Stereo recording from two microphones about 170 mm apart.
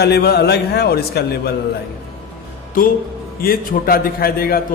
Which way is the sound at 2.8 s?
55° left (ahead or behind).